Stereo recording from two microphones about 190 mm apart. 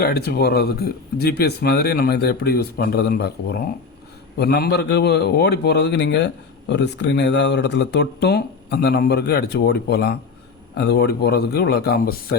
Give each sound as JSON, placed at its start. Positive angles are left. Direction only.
{"t": 0.0, "sound": "a man's voice", "side_deg": 55}